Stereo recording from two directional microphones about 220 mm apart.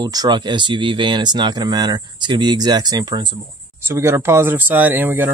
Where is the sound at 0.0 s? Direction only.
20° right (ahead or behind).